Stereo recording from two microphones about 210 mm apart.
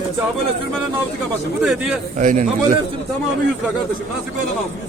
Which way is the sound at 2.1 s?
35° right (ahead or behind).